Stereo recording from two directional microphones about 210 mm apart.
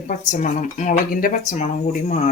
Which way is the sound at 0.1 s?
35° left (ahead or behind).